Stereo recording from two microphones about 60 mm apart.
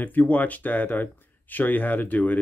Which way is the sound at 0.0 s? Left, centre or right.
Left.